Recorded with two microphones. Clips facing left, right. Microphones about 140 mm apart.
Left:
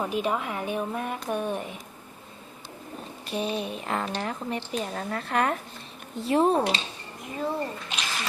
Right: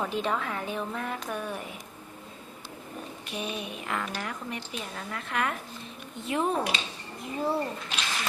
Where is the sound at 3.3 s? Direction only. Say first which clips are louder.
Left 6 dB; 30° left (ahead or behind).